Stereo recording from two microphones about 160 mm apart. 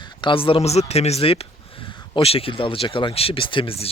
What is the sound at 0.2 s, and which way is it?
Speech, 30° left (ahead or behind).